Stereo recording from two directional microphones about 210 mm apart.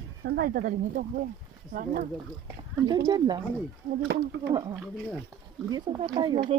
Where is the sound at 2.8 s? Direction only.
20° right (ahead or behind).